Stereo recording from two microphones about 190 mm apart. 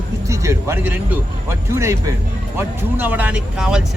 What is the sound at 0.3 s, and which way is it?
Speech, 15° right (ahead or behind).